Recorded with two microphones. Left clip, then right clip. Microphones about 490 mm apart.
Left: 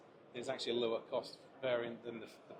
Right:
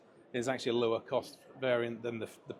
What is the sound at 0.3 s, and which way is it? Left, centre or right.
Speech, right.